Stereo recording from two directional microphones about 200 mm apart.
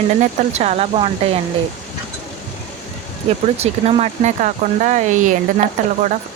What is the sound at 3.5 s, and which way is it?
Speech, 30° right (ahead or behind).